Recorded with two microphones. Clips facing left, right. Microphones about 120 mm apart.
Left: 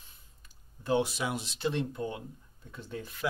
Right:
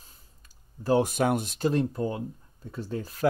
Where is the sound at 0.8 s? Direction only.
45° right (ahead or behind).